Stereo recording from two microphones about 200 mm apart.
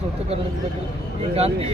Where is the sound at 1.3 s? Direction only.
30° right (ahead or behind).